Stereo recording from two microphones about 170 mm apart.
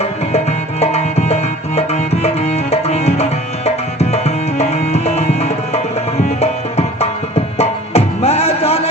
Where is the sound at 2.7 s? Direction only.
40° left (ahead or behind).